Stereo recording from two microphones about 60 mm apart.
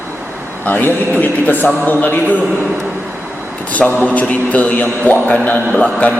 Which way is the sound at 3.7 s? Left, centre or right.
Left.